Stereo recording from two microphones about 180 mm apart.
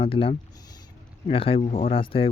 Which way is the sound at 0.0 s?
30° left (ahead or behind).